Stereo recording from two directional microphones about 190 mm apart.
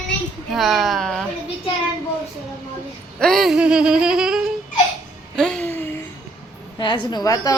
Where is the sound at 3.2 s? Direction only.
Centre (ahead or behind).